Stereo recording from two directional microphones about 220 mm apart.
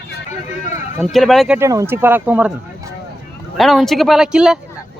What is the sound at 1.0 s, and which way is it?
Speech, centre (ahead or behind).